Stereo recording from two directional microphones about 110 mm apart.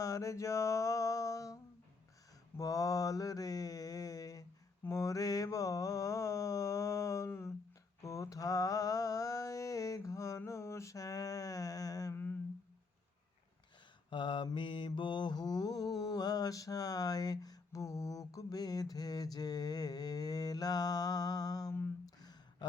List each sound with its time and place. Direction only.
0.0 s mantra: 30° left (ahead or behind)
2.6 s mantra: 30° left (ahead or behind)
12.1 s humming: 15° left (ahead or behind)
14.1 s mantra: 50° left (ahead or behind)
22.2 s a sound: 40° left (ahead or behind)